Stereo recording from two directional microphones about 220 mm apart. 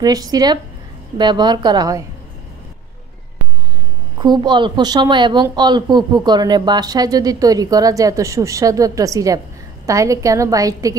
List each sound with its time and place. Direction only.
0.0 s a woman's voice: 15° right (ahead or behind)
4.2 s a woman's voice: 20° right (ahead or behind)